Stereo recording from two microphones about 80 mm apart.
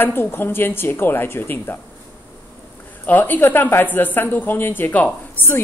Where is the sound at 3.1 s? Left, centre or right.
Left.